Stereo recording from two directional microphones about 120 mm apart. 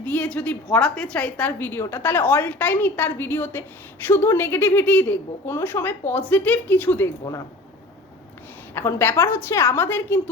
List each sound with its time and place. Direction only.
0.0 s a woman's voice: 15° left (ahead or behind)
8.7 s a woman's voice: 20° left (ahead or behind)